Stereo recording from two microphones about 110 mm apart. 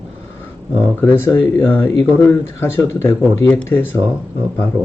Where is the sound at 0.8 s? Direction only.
20° left (ahead or behind).